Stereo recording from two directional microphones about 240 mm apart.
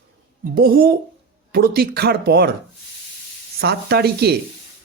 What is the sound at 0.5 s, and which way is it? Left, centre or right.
Speech, right.